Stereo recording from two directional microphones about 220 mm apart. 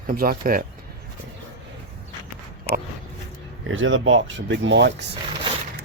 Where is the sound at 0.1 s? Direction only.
40° right (ahead or behind).